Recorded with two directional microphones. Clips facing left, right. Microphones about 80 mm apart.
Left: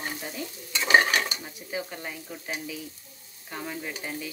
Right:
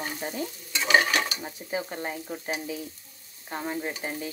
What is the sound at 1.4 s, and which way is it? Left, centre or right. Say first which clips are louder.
Stir: right 2 dB; right.